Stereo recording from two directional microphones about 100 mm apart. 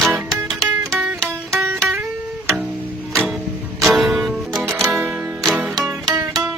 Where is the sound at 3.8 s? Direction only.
Centre (ahead or behind).